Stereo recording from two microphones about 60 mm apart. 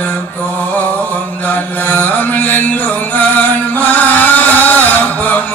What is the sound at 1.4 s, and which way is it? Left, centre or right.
Chant, left.